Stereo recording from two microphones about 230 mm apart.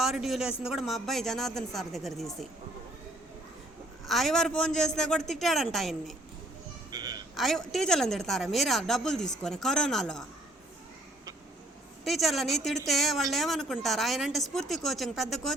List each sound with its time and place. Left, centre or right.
0.0 s a woman's voice: centre
4.0 s a woman's voice: centre
6.9 s a sound: centre
7.3 s a woman's voice: centre
12.0 s a woman's voice: centre